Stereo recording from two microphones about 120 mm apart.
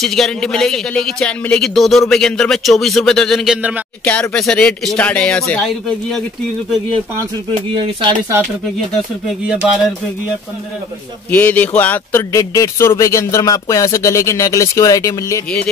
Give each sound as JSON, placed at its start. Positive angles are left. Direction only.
{"t": 0.0, "sound": "speech", "side_deg": 5}
{"t": 7.8, "sound": "speech", "side_deg": -40}
{"t": 9.6, "sound": "speech", "side_deg": -5}
{"t": 11.2, "sound": "speech", "side_deg": 15}